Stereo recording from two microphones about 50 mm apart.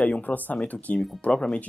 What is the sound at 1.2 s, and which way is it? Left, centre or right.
Speech, centre.